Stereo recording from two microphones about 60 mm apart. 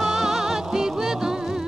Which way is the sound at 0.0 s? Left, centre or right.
Centre.